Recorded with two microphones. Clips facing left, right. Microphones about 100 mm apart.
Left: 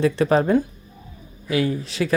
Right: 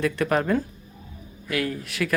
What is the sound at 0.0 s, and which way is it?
A man's voice, 25° left (ahead or behind).